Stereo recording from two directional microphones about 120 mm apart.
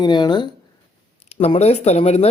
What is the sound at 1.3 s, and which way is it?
Speech, 60° left (ahead or behind).